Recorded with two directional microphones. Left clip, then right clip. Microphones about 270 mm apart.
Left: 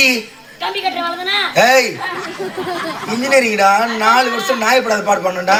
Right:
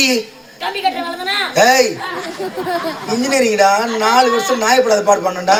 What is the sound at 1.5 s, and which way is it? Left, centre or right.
Speech, centre.